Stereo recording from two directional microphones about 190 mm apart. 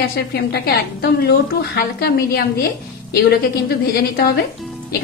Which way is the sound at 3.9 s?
55° left (ahead or behind).